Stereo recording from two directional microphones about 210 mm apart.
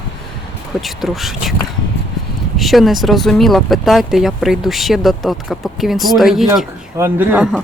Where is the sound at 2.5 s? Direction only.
Centre (ahead or behind).